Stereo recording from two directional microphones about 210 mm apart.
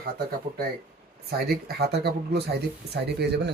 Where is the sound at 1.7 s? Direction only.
50° right (ahead or behind).